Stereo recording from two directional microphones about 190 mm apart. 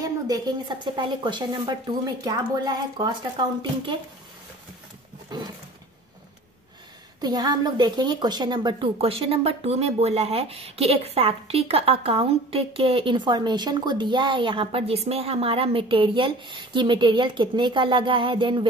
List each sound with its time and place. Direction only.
0.0 s a woman's voice: 20° right (ahead or behind)
7.2 s a woman's voice: 20° right (ahead or behind)